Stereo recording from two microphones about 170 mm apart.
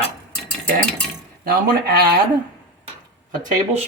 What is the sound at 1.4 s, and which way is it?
Speech, 60° right (ahead or behind).